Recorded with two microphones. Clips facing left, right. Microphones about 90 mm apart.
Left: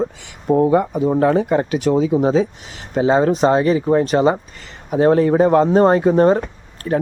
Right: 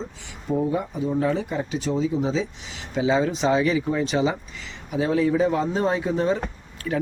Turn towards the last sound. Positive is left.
turn(degrees=40)  # may be behind; listen again after turning